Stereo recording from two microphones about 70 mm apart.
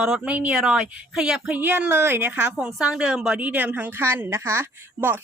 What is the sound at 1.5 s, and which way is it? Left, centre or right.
A woman's voice, right.